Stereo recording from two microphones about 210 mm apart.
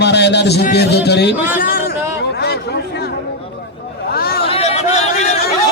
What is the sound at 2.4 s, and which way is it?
Chatter, 50° left (ahead or behind).